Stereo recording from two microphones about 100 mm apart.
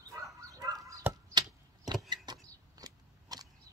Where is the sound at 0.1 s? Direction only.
35° right (ahead or behind).